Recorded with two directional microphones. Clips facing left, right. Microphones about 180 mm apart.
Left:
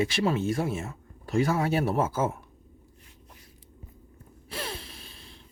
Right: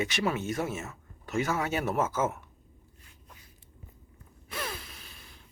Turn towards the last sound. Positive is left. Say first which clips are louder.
# left 4 dB
turn(degrees=30)  # may be behind; listen again after turning